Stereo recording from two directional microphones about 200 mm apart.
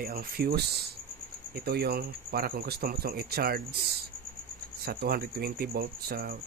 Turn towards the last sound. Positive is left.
turn(degrees=-50)  # may be behind; listen again after turning